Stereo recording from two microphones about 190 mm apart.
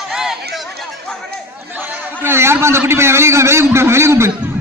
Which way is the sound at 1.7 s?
10° right (ahead or behind).